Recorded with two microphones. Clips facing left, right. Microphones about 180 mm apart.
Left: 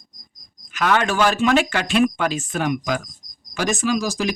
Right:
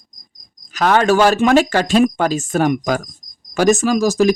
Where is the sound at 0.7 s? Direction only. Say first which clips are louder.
Right 6 dB; 40° right (ahead or behind).